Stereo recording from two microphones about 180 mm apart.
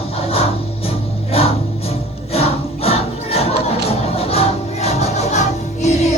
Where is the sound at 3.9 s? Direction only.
35° left (ahead or behind).